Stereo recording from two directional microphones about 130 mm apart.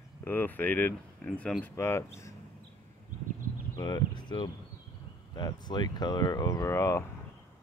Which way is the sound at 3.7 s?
30° left (ahead or behind).